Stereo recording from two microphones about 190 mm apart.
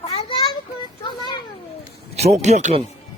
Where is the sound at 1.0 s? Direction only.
25° left (ahead or behind).